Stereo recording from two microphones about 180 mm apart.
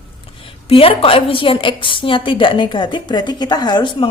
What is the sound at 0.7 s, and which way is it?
A woman's voice, 30° left (ahead or behind).